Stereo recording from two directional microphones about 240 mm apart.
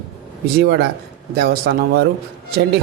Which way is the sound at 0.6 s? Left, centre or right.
Right.